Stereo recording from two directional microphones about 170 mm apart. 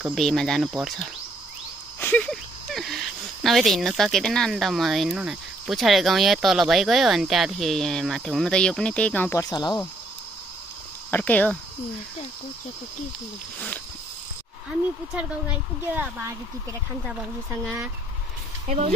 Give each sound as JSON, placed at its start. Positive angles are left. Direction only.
{"t": 0.0, "sound": "speech", "side_deg": 0}
{"t": 2.0, "sound": "a sound", "side_deg": 10}
{"t": 3.4, "sound": "speech", "side_deg": 0}
{"t": 11.1, "sound": "speech", "side_deg": 10}
{"t": 15.1, "sound": "a woman's voice", "side_deg": -10}